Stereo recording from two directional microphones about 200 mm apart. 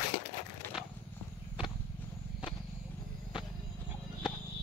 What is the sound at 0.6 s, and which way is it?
Wood, 10° left (ahead or behind).